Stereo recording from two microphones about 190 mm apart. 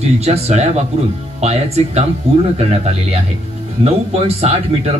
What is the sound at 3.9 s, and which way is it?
Speech, 30° right (ahead or behind).